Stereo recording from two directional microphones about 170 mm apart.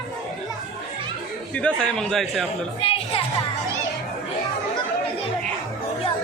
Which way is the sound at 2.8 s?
35° left (ahead or behind).